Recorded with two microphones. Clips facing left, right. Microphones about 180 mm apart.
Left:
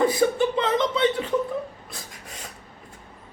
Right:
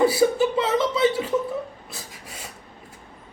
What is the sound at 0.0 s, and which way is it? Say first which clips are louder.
Chuckle: right 2 dB; 5° right (ahead or behind).